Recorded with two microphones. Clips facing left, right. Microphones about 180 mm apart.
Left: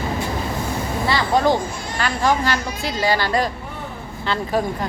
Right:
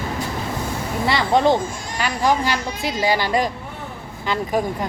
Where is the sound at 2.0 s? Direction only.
15° right (ahead or behind).